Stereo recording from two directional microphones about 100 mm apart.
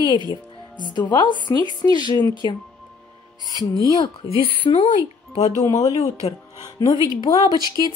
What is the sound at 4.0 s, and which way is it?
Speech, 60° left (ahead or behind).